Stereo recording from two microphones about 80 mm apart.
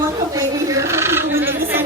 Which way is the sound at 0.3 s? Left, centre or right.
Right.